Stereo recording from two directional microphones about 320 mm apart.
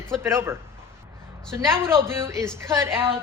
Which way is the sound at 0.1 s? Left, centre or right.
Centre.